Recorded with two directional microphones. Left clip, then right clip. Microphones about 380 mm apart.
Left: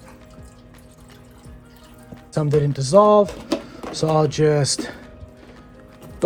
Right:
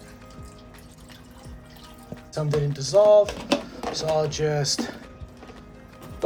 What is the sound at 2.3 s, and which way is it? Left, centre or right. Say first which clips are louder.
Speech: left 6 dB; centre.